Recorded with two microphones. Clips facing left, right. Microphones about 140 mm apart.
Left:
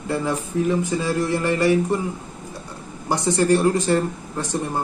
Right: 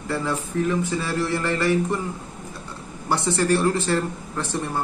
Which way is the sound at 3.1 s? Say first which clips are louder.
Left 3 dB; 15° left (ahead or behind).